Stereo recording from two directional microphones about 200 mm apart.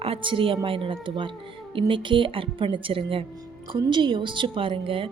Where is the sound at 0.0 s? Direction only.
25° right (ahead or behind).